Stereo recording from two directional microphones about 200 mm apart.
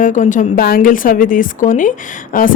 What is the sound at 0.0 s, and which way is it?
Speech, 40° left (ahead or behind).